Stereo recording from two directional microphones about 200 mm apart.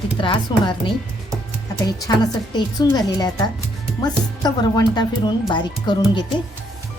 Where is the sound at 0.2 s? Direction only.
25° left (ahead or behind).